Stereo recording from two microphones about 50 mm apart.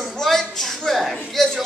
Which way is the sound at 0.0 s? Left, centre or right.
Centre.